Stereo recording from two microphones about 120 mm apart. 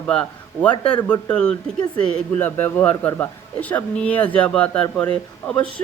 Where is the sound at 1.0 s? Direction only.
15° left (ahead or behind).